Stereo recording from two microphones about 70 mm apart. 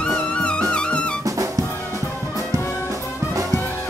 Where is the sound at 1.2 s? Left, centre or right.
Right.